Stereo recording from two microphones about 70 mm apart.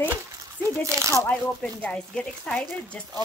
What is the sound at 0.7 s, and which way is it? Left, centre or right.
Speech, right.